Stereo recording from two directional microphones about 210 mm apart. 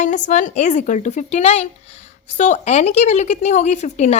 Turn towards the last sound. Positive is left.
turn(degrees=35)  # may be behind; listen again after turning